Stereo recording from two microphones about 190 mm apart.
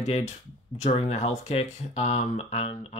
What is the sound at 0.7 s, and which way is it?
Speech, 35° left (ahead or behind).